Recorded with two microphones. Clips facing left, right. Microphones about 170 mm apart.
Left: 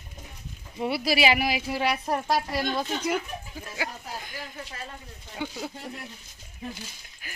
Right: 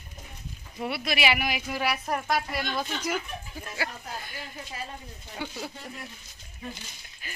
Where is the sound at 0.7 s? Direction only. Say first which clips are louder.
Left 5 dB; 25° left (ahead or behind).